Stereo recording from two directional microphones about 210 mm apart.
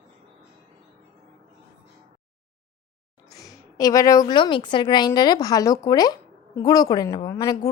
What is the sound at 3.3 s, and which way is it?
A woman's voice, 15° left (ahead or behind).